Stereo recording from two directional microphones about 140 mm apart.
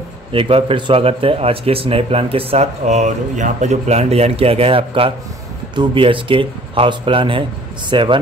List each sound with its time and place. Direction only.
0.3 s a man's voice: 40° right (ahead or behind)